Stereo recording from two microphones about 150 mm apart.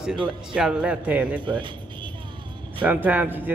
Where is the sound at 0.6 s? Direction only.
5° right (ahead or behind).